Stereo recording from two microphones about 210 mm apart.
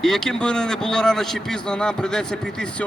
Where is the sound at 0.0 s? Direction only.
Centre (ahead or behind).